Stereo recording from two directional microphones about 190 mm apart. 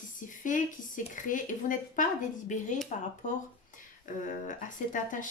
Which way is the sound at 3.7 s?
40° left (ahead or behind).